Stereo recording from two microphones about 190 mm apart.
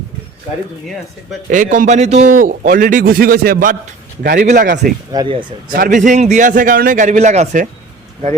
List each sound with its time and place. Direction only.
1.5 s a man's voice: 40° right (ahead or behind); by 4.9 s 60° right (ahead or behind)
5.1 s speech: 25° right (ahead or behind)
5.7 s a man's voice: 45° right (ahead or behind)